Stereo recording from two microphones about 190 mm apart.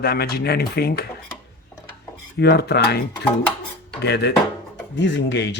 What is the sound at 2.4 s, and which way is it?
Speech, 60° left (ahead or behind).